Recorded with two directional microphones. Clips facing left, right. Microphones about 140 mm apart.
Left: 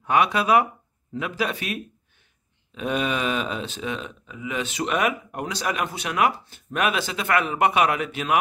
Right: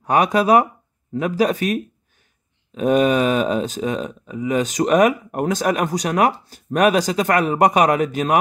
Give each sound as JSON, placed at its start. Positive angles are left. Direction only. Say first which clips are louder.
{"t": 0.0, "sound": "speech", "louder": "right 4 dB", "side_deg": -40}